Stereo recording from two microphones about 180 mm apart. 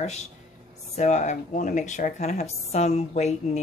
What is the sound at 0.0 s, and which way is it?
Speech, 40° left (ahead or behind).